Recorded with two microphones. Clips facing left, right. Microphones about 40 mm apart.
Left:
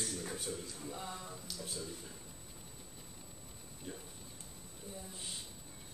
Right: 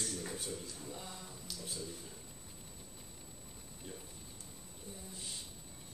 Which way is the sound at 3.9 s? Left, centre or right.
Centre.